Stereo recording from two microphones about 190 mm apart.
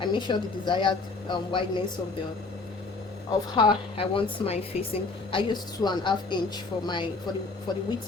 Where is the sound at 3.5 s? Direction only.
25° left (ahead or behind).